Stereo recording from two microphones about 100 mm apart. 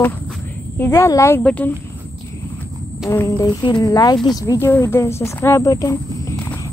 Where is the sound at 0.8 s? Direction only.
25° left (ahead or behind).